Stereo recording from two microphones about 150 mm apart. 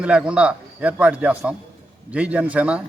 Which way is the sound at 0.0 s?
5° right (ahead or behind).